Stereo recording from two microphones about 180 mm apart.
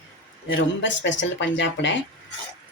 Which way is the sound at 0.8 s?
90° left.